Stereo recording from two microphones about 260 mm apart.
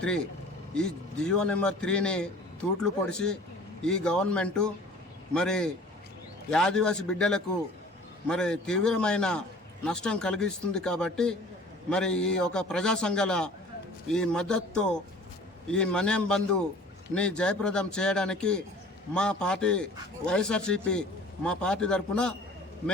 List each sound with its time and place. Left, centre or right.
0.7 s a man's voice: centre